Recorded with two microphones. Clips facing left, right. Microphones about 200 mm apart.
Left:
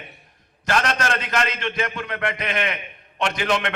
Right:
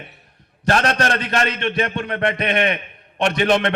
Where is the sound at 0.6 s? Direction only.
35° right (ahead or behind).